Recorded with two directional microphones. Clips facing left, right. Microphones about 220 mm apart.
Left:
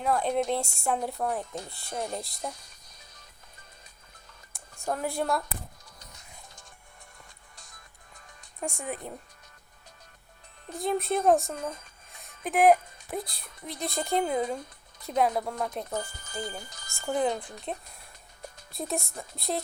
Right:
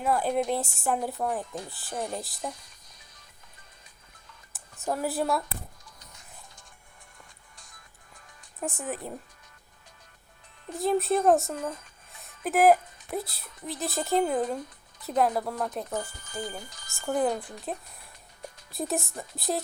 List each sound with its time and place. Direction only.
0.0 s speech: 5° right (ahead or behind)
4.5 s a sound: 5° right (ahead or behind)
7.5 s music: 40° left (ahead or behind)
8.6 s speech: centre (ahead or behind)
10.8 s speech: centre (ahead or behind)
12.2 s a sound: centre (ahead or behind)
13.7 s speech: centre (ahead or behind)
17.1 s speech: 5° right (ahead or behind)